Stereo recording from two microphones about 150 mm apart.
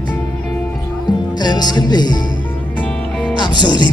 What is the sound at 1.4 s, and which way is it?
Music, 30° left (ahead or behind).